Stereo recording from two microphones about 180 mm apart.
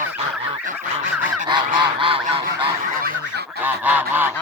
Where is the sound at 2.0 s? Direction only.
30° right (ahead or behind).